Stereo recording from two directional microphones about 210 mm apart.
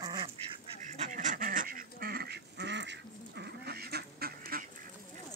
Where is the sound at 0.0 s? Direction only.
20° right (ahead or behind).